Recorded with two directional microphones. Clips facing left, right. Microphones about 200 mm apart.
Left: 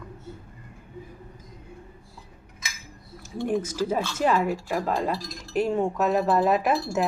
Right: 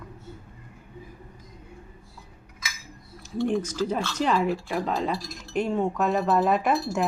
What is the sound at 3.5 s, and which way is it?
Speech, 10° left (ahead or behind).